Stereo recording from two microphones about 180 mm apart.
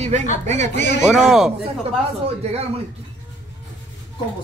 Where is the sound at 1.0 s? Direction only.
5° right (ahead or behind).